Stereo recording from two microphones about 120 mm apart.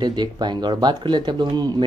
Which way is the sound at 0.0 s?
35° right (ahead or behind).